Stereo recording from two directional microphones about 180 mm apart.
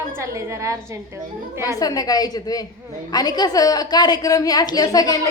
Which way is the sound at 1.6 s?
20° left (ahead or behind).